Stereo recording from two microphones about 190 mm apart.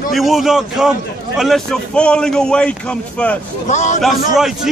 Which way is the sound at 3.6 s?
40° left (ahead or behind).